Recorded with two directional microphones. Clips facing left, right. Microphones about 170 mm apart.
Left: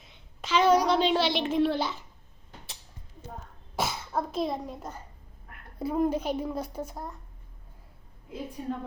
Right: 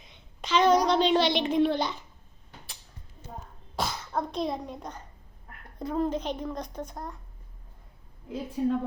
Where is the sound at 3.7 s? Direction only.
5° left (ahead or behind).